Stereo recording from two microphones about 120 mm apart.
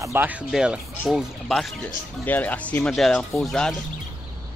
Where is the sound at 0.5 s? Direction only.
5° right (ahead or behind).